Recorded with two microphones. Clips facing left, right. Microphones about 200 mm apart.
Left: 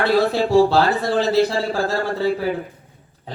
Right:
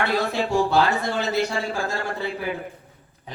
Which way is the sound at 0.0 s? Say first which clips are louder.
Left 6 dB; 35° left (ahead or behind).